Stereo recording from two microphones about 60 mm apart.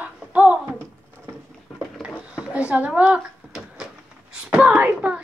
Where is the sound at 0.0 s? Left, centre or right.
Right.